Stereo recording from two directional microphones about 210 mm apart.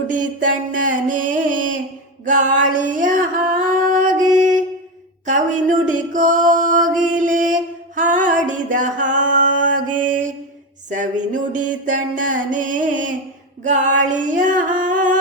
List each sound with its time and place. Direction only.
0.1 s a sound: 40° right (ahead or behind)
2.2 s singing: 35° right (ahead or behind)
5.2 s music: 35° right (ahead or behind)
8.4 s a sound: 35° right (ahead or behind)
9.9 s mantra: 40° right (ahead or behind)
10.8 s music: 35° right (ahead or behind)